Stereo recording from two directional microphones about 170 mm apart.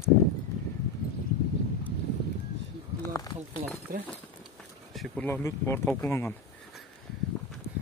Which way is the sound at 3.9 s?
60° right (ahead or behind).